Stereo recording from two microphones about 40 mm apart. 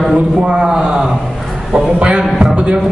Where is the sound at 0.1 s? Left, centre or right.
Centre.